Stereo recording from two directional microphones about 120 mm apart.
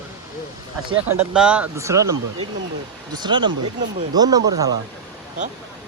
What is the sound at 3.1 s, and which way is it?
Speech, 40° right (ahead or behind).